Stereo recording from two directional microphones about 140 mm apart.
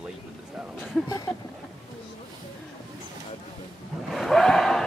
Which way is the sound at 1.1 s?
25° left (ahead or behind).